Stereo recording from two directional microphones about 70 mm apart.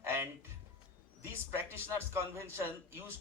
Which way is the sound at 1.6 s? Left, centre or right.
Right.